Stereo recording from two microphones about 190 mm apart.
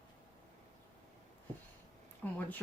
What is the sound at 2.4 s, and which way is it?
Speech, 10° left (ahead or behind).